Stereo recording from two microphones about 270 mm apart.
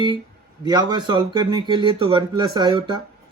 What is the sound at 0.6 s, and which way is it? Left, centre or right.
Speech, centre.